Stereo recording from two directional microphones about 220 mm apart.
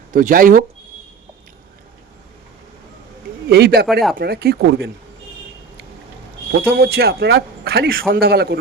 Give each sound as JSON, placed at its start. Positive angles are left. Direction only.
{"t": 0.1, "sound": "speech", "side_deg": -40}
{"t": 3.5, "sound": "a man's voice", "side_deg": -45}
{"t": 6.6, "sound": "a man's voice", "side_deg": -45}